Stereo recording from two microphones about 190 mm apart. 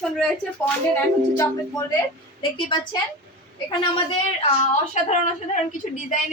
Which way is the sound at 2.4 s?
25° left (ahead or behind).